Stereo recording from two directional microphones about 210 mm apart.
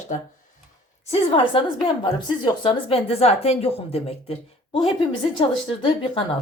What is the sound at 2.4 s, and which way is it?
Speech, 20° left (ahead or behind).